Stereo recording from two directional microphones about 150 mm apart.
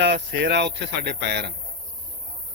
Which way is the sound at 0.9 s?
90° right.